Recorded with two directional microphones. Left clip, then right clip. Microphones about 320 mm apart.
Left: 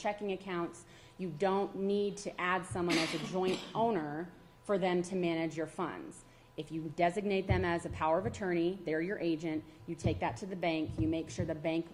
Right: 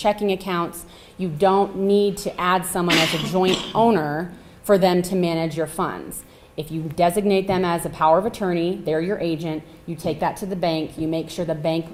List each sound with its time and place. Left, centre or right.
0.0 s speech: right
1.2 s a woman's voice: right
3.3 s speech: right
5.1 s a woman's voice: right